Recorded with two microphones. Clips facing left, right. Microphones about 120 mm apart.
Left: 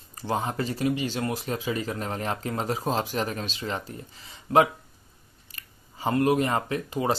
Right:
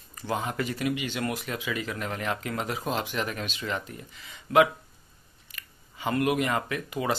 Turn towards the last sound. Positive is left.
turn(degrees=30)  # may be behind; listen again after turning